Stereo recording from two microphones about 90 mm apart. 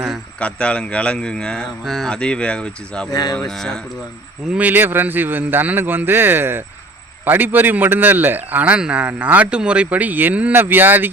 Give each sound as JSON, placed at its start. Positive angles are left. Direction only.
{"t": 0.3, "sound": "speech", "side_deg": 10}
{"t": 2.1, "sound": "speech", "side_deg": 10}
{"t": 3.1, "sound": "cattle", "side_deg": 50}
{"t": 3.3, "sound": "speech", "side_deg": 5}
{"t": 4.4, "sound": "speech", "side_deg": -20}